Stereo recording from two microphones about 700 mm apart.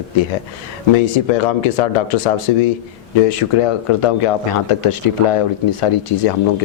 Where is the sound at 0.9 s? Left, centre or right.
Left.